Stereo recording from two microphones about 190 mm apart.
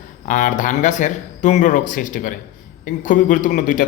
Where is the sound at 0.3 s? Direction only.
45° left (ahead or behind).